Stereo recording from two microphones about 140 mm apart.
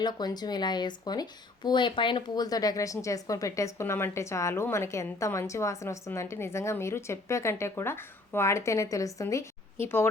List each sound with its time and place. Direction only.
0.0 s speech: 30° left (ahead or behind)